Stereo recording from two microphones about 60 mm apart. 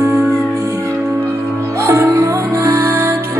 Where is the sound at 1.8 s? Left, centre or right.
Right.